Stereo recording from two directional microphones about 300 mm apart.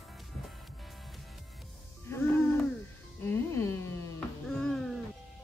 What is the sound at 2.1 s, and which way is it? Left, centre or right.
Music, centre.